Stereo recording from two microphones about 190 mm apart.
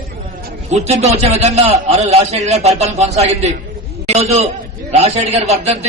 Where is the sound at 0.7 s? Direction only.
35° right (ahead or behind).